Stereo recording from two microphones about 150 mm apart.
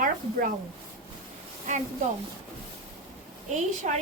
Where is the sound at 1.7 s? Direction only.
60° right (ahead or behind).